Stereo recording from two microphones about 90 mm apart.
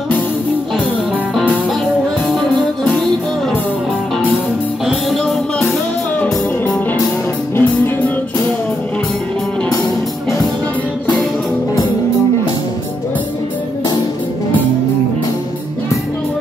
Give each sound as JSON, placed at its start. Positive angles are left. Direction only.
{"t": 2.2, "sound": "music", "side_deg": 5}
{"t": 4.8, "sound": "music", "side_deg": 5}
{"t": 7.5, "sound": "music", "side_deg": 25}